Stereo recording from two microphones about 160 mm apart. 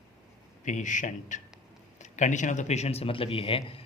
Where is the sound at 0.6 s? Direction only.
50° left (ahead or behind).